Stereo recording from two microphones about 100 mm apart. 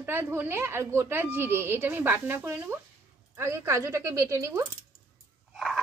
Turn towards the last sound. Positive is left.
turn(degrees=0)  # may be behind; listen again after turning